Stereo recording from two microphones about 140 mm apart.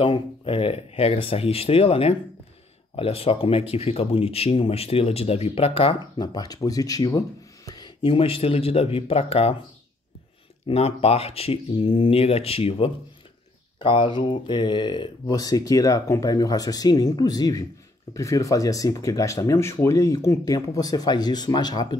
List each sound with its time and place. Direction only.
0.0 s speech: 40° left (ahead or behind)
6.2 s speech: 25° left (ahead or behind); by 9.6 s 45° left (ahead or behind)
10.7 s speech: 45° left (ahead or behind); by 21.8 s 30° left (ahead or behind)